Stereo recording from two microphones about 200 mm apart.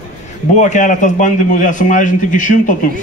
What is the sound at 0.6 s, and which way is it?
A man's voice, 35° left (ahead or behind).